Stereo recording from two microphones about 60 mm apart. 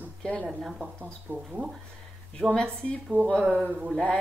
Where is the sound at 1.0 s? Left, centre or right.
Right.